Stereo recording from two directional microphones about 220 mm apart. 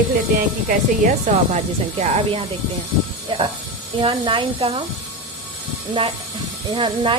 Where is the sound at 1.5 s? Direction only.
30° right (ahead or behind).